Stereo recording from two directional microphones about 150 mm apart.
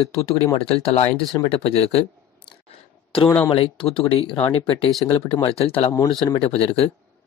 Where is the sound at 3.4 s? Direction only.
35° left (ahead or behind).